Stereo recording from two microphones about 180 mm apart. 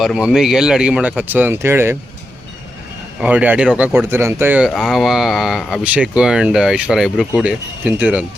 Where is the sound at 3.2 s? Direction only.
10° right (ahead or behind).